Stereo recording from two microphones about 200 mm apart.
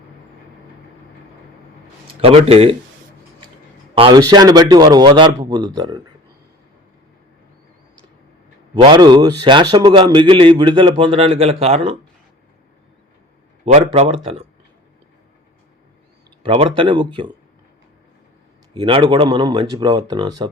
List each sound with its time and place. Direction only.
2.2 s a man's voice: 30° right (ahead or behind)
3.9 s a man's voice: 25° right (ahead or behind)
8.7 s a man's voice: 20° right (ahead or behind)
13.7 s speech: 35° right (ahead or behind)
16.4 s a man's voice: 30° right (ahead or behind)
18.7 s a man's voice: 25° right (ahead or behind)